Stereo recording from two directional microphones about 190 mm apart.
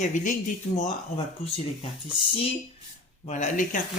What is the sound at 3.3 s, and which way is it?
Speech, 40° left (ahead or behind).